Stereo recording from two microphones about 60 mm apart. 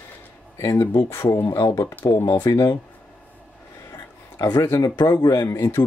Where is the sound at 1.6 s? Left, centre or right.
Left.